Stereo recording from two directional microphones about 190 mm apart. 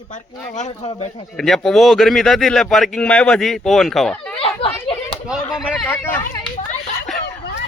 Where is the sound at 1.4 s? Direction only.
Centre (ahead or behind).